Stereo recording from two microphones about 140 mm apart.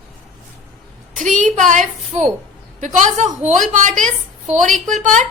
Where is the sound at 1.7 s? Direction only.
60° right (ahead or behind).